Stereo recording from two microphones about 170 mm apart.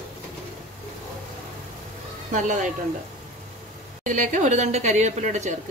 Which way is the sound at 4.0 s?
50° right (ahead or behind).